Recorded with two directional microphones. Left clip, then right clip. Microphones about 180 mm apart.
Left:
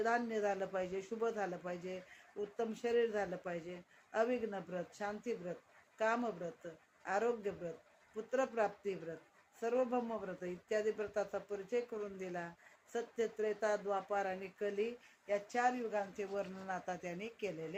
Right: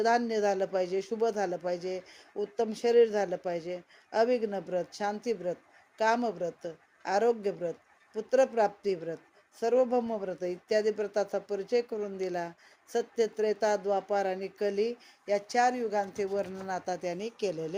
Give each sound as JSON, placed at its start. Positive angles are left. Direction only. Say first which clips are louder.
{"t": 0.0, "sound": "speech", "louder": "right 9 dB", "side_deg": -40}